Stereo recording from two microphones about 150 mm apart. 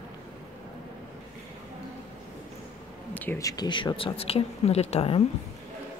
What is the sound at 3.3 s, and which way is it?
Speech, 25° left (ahead or behind).